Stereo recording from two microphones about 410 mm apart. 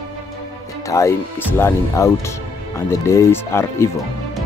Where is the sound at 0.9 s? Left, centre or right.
Centre.